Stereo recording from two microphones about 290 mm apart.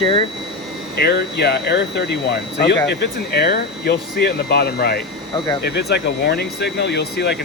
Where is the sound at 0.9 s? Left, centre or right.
Left.